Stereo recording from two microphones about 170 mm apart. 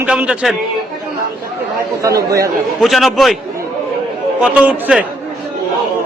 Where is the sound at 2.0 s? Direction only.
20° right (ahead or behind).